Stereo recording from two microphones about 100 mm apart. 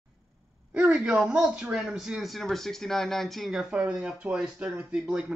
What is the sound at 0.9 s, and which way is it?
Speech, 10° right (ahead or behind).